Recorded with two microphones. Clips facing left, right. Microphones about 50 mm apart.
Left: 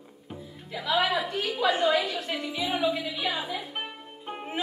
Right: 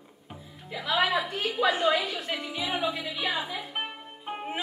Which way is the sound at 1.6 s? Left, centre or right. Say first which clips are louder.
Even; right.